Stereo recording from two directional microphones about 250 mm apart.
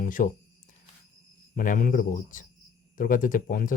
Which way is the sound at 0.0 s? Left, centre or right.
Left.